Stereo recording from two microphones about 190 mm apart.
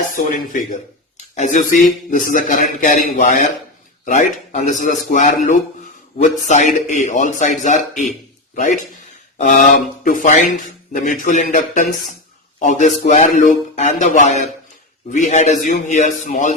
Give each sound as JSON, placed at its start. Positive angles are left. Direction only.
{"t": 0.2, "sound": "a man's voice", "side_deg": 45}